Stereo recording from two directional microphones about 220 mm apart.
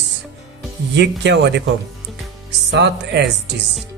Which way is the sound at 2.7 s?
50° right (ahead or behind).